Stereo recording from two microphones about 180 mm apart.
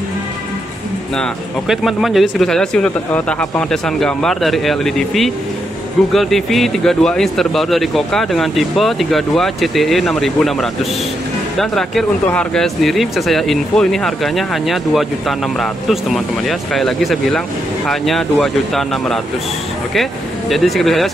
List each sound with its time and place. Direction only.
1.1 s speech: centre (ahead or behind)